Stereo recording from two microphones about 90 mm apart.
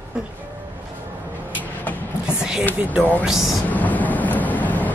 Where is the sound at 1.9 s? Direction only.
20° left (ahead or behind).